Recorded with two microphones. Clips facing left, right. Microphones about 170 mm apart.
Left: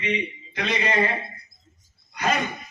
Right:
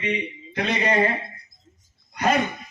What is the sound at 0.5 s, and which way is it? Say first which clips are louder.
Speech: right 3 dB; 50° right (ahead or behind).